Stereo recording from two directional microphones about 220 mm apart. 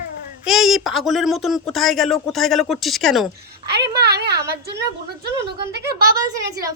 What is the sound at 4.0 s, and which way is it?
Speech, 50° right (ahead or behind).